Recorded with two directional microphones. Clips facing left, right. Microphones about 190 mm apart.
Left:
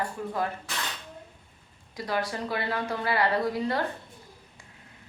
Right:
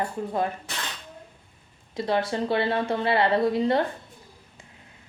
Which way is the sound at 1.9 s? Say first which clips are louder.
Right 5 dB; 25° right (ahead or behind).